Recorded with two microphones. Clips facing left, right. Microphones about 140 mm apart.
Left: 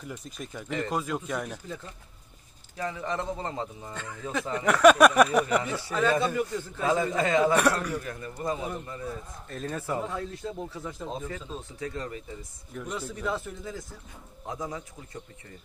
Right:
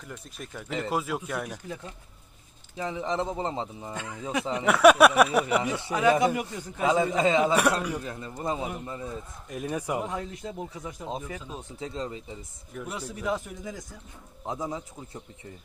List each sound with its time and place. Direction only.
0.1 s speech: centre (ahead or behind)
2.7 s a man's voice: 20° right (ahead or behind)
12.7 s a man's voice: 5° right (ahead or behind); by 14.8 s 20° right (ahead or behind)